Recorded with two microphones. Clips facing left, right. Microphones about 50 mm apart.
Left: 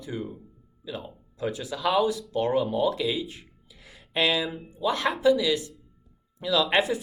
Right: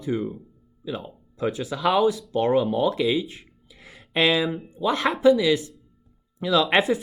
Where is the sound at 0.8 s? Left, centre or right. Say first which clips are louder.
Right 4 dB; right.